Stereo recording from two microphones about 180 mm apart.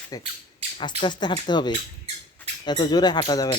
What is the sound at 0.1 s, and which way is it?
Speech, 20° left (ahead or behind).